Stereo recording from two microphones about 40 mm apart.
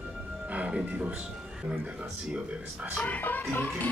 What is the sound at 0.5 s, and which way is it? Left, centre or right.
Music, right.